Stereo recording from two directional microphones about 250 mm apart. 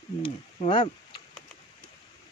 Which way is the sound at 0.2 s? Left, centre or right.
Centre.